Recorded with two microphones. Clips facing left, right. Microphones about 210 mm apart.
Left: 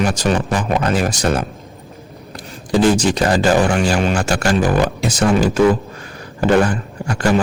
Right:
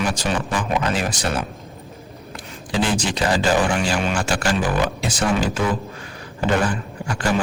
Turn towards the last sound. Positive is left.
turn(degrees=40)  # may be behind; listen again after turning